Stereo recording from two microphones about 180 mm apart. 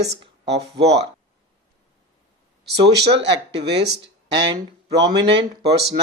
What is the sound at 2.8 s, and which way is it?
Speech, 70° right (ahead or behind).